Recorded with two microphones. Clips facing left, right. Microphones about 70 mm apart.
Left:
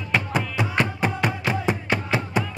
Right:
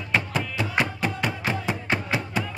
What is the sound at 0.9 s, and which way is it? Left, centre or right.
Music, left.